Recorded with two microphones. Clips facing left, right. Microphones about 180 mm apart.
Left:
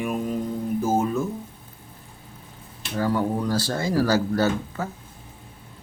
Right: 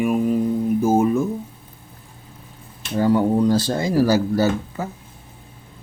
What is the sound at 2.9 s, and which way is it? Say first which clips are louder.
Speech: right 6 dB; 20° right (ahead or behind).